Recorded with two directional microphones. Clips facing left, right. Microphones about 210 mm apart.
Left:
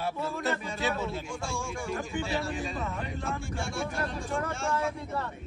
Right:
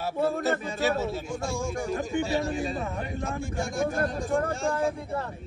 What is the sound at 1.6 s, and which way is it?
Speech, 40° right (ahead or behind).